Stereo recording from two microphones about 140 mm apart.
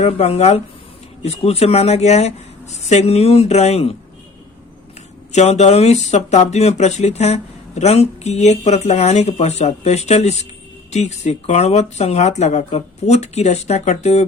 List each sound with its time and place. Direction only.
0.0 s speech: 50° left (ahead or behind)
5.3 s speech: 50° left (ahead or behind)